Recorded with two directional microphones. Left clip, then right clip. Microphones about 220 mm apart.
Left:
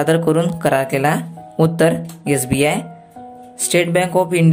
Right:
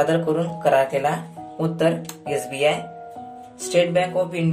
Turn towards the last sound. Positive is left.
turn(degrees=50)  # may be behind; listen again after turning